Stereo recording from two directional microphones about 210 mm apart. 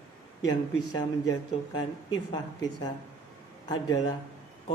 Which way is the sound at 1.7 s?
20° left (ahead or behind).